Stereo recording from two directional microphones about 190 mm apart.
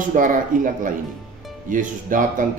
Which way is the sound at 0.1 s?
45° right (ahead or behind).